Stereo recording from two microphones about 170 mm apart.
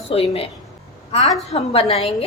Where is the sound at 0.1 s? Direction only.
35° left (ahead or behind).